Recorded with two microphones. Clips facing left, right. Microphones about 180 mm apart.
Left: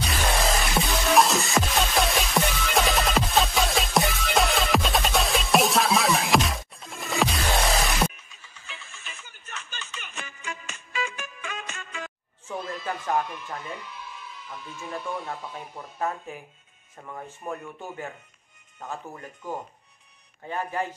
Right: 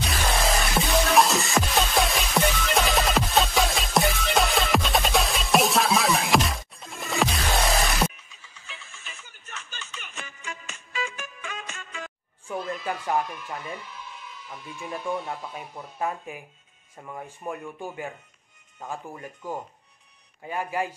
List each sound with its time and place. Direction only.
0.0 s music: centre (ahead or behind)
8.2 s music: 50° left (ahead or behind)
12.4 s neigh: 10° right (ahead or behind)
14.8 s speech: 15° right (ahead or behind)